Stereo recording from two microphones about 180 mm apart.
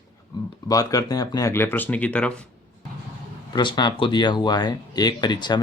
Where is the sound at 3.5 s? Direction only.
25° left (ahead or behind).